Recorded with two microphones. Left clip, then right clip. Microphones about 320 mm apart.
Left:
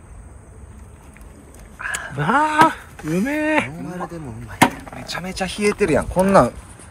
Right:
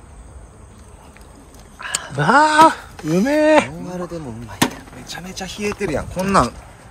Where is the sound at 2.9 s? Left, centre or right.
Right.